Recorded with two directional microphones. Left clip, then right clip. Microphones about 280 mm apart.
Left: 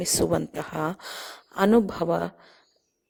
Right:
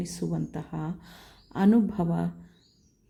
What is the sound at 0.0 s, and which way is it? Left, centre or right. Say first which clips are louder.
Speech: left 11 dB; left.